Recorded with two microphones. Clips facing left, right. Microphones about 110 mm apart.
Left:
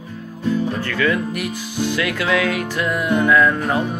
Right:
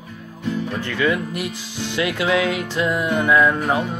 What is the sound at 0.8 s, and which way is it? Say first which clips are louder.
Speech: left 1 dB; 20° right (ahead or behind).